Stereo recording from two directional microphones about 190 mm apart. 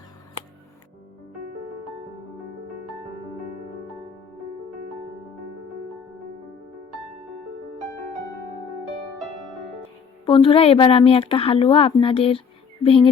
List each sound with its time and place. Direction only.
10.2 s a woman's voice: 25° left (ahead or behind)